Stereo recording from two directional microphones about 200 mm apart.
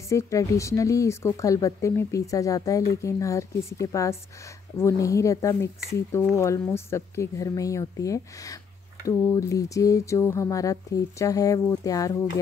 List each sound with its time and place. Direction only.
0.1 s speech: 15° left (ahead or behind)